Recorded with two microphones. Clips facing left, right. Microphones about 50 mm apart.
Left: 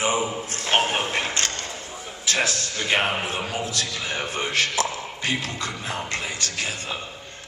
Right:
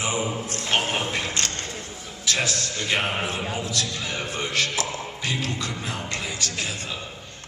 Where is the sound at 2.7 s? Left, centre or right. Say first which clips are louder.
Left 3 dB; left.